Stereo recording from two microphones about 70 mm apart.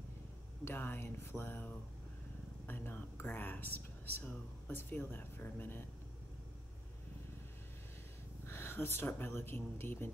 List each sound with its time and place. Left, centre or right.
0.7 s speech: left
8.5 s speech: left